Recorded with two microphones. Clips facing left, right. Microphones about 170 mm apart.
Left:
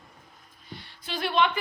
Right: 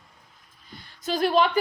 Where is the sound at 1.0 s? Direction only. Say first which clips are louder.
Right 4 dB; 40° right (ahead or behind).